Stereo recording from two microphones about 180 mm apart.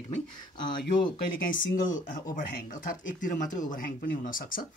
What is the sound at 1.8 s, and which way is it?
Speech, 50° left (ahead or behind).